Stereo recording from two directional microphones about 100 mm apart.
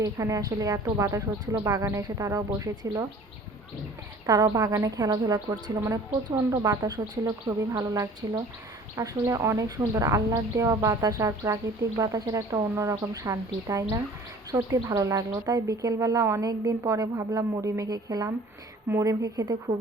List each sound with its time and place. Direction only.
0.0 s a woman's voice: 35° right (ahead or behind)
4.3 s a woman's voice: 35° right (ahead or behind)